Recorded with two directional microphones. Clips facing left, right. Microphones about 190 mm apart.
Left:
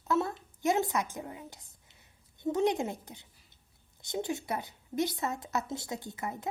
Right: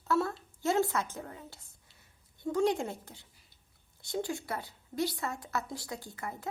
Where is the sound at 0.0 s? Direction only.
20° left (ahead or behind).